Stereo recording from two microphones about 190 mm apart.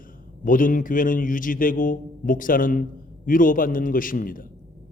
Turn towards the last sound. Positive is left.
turn(degrees=45)  # may be behind; listen again after turning